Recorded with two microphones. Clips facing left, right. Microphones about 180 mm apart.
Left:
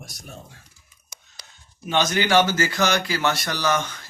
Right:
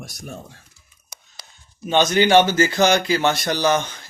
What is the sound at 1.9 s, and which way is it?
Speech, 20° right (ahead or behind).